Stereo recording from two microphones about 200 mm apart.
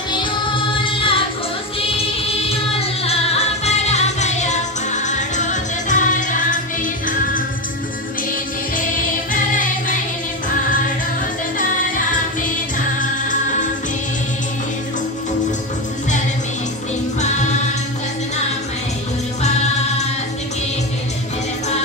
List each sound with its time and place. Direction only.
0.1 s music: 25° left (ahead or behind); by 6.6 s 40° left (ahead or behind)
9.3 s music: 40° left (ahead or behind)
17.2 s music: 35° left (ahead or behind)
19.4 s music: 35° left (ahead or behind)